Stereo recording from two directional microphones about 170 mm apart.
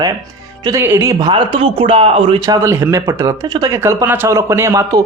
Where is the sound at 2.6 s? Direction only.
15° right (ahead or behind).